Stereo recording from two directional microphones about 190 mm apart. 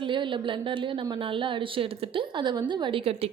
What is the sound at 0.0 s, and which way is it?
A woman's voice, 25° right (ahead or behind).